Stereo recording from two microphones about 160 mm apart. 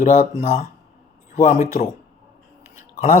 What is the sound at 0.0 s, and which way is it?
Speech, 55° left (ahead or behind).